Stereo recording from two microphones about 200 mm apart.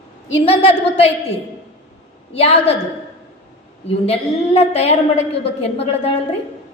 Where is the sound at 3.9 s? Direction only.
30° left (ahead or behind).